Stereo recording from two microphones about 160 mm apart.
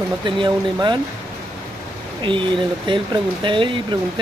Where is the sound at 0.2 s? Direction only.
30° right (ahead or behind).